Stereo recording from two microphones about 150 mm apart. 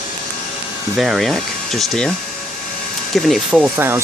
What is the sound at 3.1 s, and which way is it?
Speech, centre (ahead or behind).